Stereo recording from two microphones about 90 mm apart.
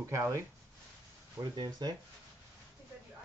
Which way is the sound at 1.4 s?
50° right (ahead or behind).